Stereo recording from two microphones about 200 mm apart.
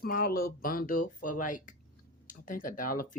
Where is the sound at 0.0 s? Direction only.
45° left (ahead or behind).